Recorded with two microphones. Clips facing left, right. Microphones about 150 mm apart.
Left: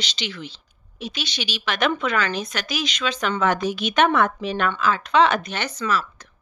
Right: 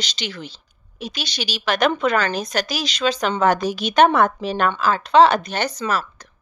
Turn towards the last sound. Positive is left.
turn(degrees=-40)  # may be behind; listen again after turning